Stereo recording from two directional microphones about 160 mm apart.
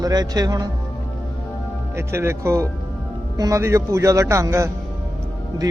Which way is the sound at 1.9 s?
15° right (ahead or behind).